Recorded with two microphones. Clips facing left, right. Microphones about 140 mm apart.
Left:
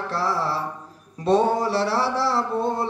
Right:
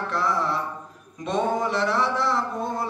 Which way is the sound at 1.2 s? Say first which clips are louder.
Left 5 dB; 35° left (ahead or behind).